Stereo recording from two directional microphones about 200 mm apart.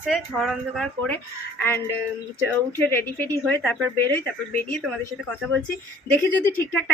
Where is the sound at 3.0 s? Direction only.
10° left (ahead or behind).